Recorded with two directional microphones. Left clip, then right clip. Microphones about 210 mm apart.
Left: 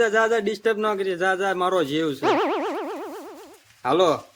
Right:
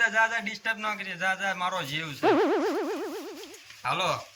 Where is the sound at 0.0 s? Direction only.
35° left (ahead or behind).